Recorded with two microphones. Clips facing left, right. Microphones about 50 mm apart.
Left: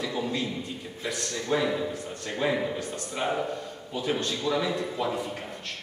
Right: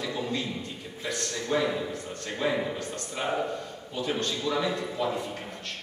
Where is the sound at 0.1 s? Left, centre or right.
Centre.